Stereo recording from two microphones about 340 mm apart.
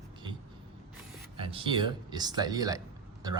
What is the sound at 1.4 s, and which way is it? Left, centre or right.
Speech, centre.